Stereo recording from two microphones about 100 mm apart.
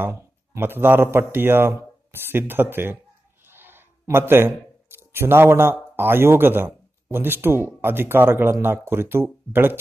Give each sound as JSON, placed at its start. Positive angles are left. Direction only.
{"t": 0.0, "sound": "a man's voice", "side_deg": -25}